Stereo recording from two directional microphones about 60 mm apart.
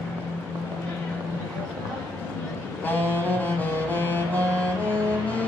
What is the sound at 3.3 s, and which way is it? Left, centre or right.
Music, left.